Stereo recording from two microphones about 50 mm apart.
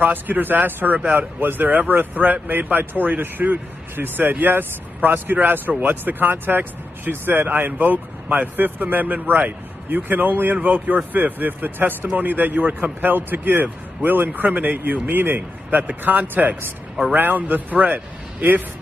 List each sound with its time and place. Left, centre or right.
0.0 s speech: right